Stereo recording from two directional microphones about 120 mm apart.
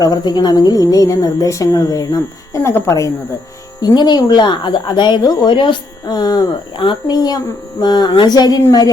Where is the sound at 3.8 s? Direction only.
35° left (ahead or behind).